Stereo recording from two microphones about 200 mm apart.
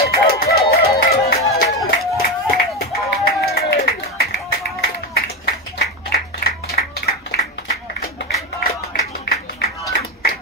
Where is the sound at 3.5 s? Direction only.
50° left (ahead or behind).